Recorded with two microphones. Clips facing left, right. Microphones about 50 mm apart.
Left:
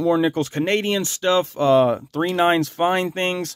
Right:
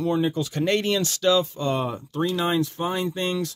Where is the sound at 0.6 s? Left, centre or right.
Left.